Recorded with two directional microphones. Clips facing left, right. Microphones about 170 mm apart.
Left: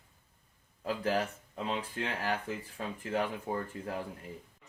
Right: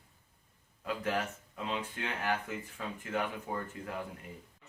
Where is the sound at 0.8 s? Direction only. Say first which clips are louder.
Left 3 dB; 35° left (ahead or behind).